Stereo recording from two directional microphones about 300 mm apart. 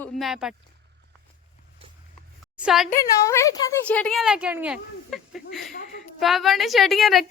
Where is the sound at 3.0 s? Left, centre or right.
Centre.